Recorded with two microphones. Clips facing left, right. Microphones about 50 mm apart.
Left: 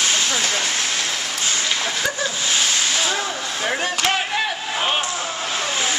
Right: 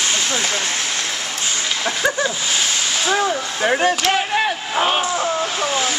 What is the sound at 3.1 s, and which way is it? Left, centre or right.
Whip, centre.